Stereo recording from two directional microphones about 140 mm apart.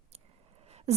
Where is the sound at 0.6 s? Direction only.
50° right (ahead or behind).